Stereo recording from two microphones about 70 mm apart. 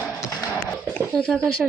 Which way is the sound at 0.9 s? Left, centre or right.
Centre.